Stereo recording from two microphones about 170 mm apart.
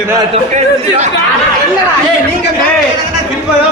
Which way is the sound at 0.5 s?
45° right (ahead or behind).